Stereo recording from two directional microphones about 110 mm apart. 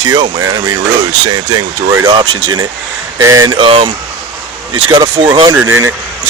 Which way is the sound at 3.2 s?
30° right (ahead or behind).